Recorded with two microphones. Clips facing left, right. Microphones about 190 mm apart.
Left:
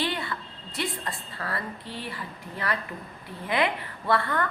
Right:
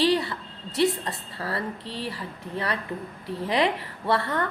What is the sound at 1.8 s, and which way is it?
Speech, 80° right.